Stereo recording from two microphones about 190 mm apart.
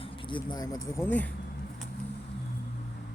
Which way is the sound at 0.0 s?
25° left (ahead or behind).